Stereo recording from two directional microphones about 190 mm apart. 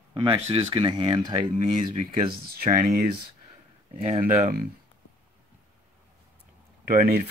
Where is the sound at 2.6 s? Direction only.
45° right (ahead or behind).